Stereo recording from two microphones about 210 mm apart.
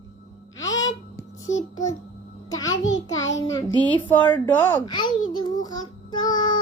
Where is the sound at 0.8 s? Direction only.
15° left (ahead or behind).